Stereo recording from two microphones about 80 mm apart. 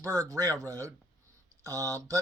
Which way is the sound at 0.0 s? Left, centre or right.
Right.